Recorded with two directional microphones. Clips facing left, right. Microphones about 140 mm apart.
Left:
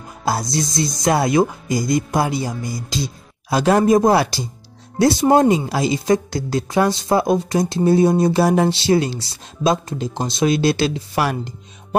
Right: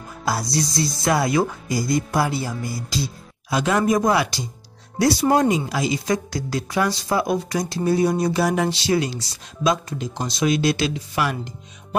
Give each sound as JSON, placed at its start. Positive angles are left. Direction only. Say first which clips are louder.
{"t": 0.2, "sound": "speech", "louder": "left 2 dB", "side_deg": 25}
{"t": 3.4, "sound": "speech", "louder": "left 5 dB", "side_deg": 35}